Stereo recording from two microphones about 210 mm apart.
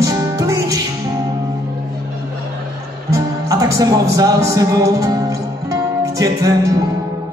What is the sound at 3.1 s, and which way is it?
Speech, 15° right (ahead or behind).